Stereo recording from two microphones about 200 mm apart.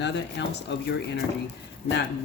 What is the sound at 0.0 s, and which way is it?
Speech, 60° left (ahead or behind).